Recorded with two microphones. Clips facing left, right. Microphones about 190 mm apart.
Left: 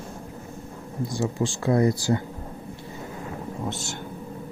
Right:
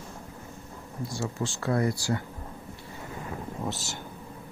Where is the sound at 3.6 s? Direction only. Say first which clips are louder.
Left 2 dB; centre (ahead or behind).